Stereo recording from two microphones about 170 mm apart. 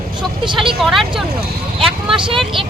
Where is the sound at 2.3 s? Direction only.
Centre (ahead or behind).